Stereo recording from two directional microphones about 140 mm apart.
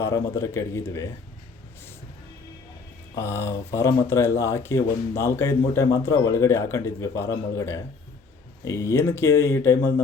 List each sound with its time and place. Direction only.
0.0 s speech: 20° left (ahead or behind)
3.2 s speech: 20° left (ahead or behind)